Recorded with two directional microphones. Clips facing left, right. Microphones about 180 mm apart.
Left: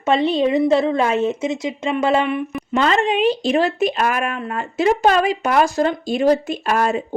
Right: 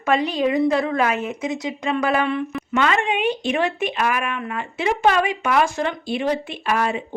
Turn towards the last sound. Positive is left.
turn(degrees=45)  # may be behind; listen again after turning